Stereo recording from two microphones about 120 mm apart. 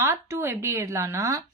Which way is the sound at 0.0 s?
20° right (ahead or behind).